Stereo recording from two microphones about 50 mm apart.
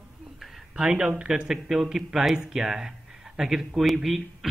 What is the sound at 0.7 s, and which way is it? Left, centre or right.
Speech, centre.